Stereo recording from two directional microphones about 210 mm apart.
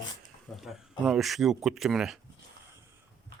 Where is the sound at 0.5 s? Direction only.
Centre (ahead or behind).